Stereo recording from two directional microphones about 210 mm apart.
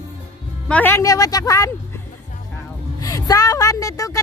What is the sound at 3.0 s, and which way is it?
A woman's voice, 15° left (ahead or behind).